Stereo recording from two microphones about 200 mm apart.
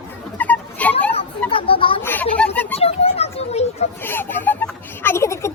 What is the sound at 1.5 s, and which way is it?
Speech, 25° left (ahead or behind).